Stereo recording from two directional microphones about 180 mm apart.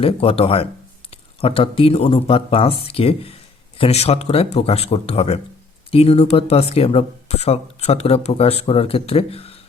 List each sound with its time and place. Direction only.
0.0 s speech: 30° left (ahead or behind)